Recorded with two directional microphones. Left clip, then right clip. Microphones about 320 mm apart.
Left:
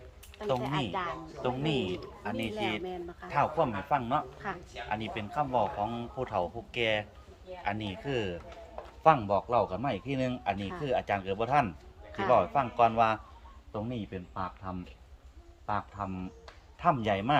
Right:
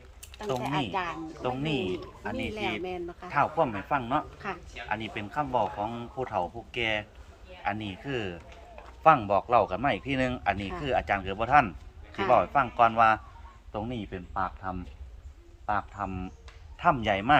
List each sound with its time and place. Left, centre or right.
0.6 s speech: right
1.4 s a man's voice: centre
2.8 s speech: right
3.2 s a man's voice: centre
4.4 s speech: right
4.9 s a man's voice: centre